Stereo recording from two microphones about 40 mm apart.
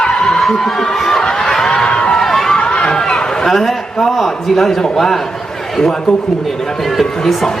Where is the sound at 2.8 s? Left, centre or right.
Left.